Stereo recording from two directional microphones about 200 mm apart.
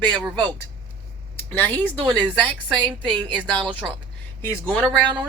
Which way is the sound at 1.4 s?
10° left (ahead or behind).